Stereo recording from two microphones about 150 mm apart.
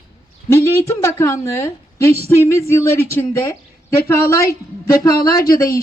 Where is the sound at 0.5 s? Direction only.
20° left (ahead or behind).